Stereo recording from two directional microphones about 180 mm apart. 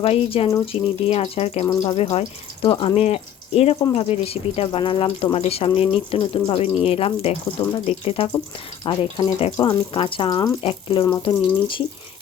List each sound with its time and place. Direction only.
0.0 s speech: 35° left (ahead or behind)
1.6 s speech: 20° left (ahead or behind)